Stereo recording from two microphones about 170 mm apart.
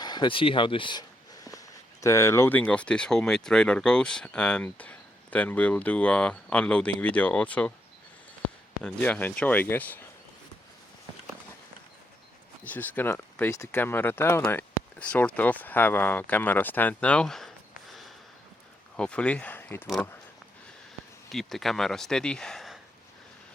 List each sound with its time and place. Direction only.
0.0 s speech: 25° left (ahead or behind); by 7.7 s 10° left (ahead or behind)
8.8 s speech: 10° left (ahead or behind)
12.6 s speech: 10° left (ahead or behind)
18.9 s speech: 5° left (ahead or behind)
21.3 s speech: centre (ahead or behind)